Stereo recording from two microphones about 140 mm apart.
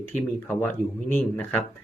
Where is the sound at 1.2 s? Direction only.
10° left (ahead or behind).